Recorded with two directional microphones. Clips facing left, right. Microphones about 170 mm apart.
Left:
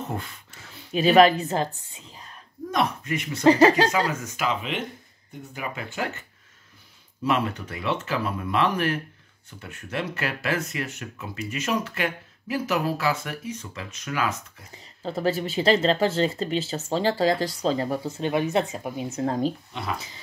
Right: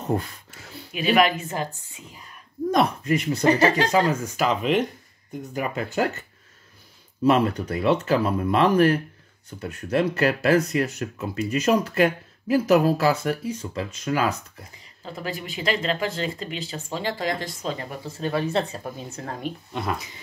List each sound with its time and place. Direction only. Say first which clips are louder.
0.9 s speech: left 4 dB; 35° left (ahead or behind)
2.7 s speech: right 4 dB; 35° right (ahead or behind)
3.4 s speech: left 3 dB; 30° left (ahead or behind)
3.9 s speech: right 4 dB; 30° right (ahead or behind)
7.2 s speech: right 6 dB; 40° right (ahead or behind)
15.0 s speech: left 7 dB; 35° left (ahead or behind); by 19.0 s 15° left (ahead or behind)
19.1 s speech: left 9 dB; 25° left (ahead or behind)